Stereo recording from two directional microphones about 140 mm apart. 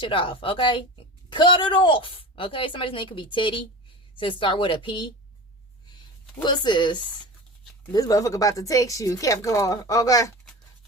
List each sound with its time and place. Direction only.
0.0 s a woman's voice: 40° left (ahead or behind)
6.4 s a woman's voice: 30° left (ahead or behind)